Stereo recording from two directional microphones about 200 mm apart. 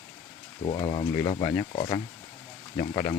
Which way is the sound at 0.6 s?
30° left (ahead or behind).